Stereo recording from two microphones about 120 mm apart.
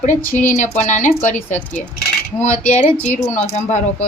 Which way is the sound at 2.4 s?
90° left.